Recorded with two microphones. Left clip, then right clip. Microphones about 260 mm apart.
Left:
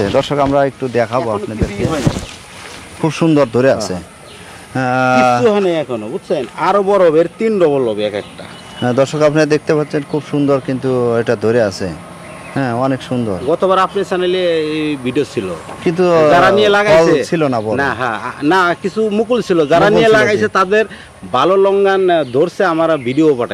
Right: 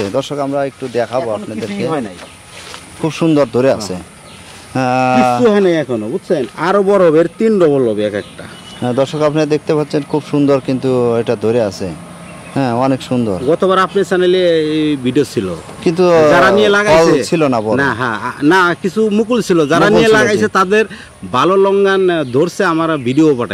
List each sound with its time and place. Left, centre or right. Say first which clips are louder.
0.1 s speech: left 4 dB; centre
0.5 s speech: left 4 dB; left
3.0 s speech: even; centre
5.4 s speech: right 2 dB; right
8.8 s speech: left 2 dB; centre
13.5 s speech: even; right
15.8 s speech: right 2 dB; centre
16.6 s speech: even; right
17.2 s speech: right 2 dB; right
17.7 s speech: right 1 dB; right